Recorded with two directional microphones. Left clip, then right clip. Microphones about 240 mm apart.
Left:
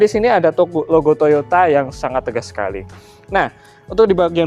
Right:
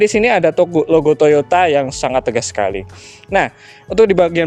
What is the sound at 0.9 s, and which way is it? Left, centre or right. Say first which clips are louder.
Speech: even; right.